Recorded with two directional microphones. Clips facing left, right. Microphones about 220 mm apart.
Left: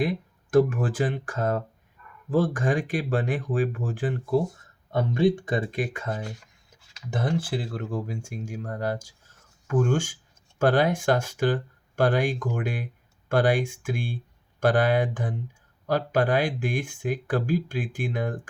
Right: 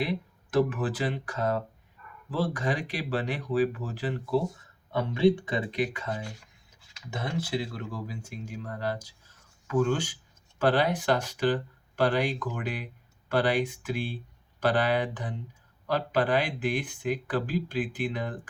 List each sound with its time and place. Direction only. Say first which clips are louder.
0.5 s speech: left 5 dB; 45° left (ahead or behind)